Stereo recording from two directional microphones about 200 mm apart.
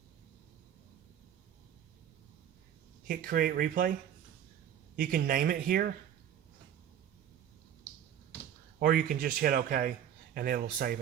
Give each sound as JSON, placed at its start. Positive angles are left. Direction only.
{"t": 3.1, "sound": "speech", "side_deg": -45}
{"t": 4.9, "sound": "speech", "side_deg": -45}
{"t": 8.8, "sound": "speech", "side_deg": -45}